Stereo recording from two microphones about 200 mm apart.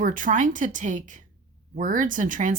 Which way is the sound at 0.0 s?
40° right (ahead or behind).